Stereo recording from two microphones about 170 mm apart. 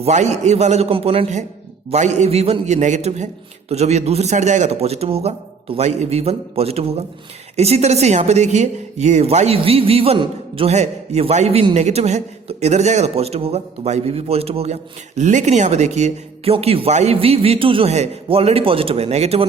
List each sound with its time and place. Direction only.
0.0 s speech: 40° right (ahead or behind)